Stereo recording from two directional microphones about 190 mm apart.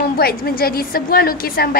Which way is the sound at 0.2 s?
55° left (ahead or behind).